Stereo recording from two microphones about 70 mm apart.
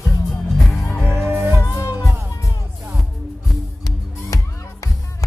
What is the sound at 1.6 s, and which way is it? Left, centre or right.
Music, left.